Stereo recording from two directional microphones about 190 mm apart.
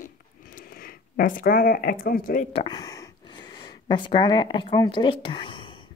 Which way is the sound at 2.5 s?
25° left (ahead or behind).